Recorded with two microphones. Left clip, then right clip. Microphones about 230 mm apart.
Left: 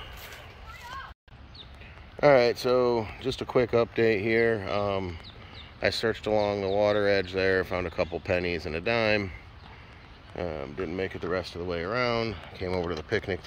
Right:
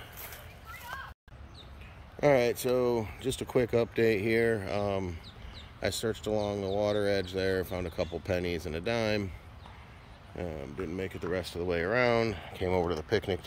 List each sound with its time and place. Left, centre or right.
2.1 s speech: centre
10.3 s speech: centre